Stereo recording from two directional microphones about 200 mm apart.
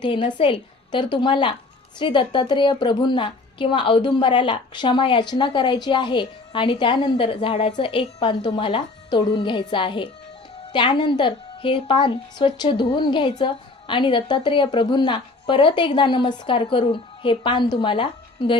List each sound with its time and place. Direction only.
0.0 s a woman's voice: 25° left (ahead or behind)